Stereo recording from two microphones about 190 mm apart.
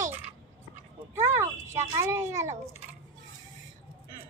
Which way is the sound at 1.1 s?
15° right (ahead or behind).